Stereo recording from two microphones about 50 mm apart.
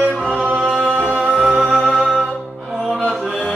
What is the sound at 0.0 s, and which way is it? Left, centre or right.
Music, right.